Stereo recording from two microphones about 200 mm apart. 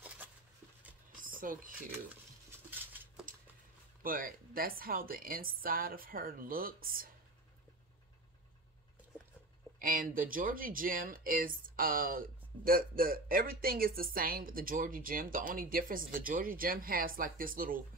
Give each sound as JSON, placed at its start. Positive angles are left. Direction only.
{"t": 1.2, "sound": "a sound", "side_deg": -45}
{"t": 4.0, "sound": "speech", "side_deg": -45}
{"t": 9.8, "sound": "speech", "side_deg": -45}